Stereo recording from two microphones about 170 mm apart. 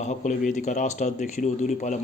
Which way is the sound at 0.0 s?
45° left (ahead or behind).